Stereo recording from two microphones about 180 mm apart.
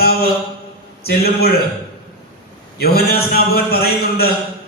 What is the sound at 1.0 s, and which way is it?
Speech, 60° left (ahead or behind).